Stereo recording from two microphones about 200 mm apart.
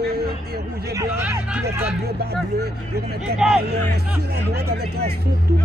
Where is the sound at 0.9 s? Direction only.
15° right (ahead or behind).